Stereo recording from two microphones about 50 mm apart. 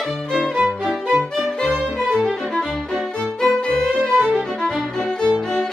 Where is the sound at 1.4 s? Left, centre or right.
Centre.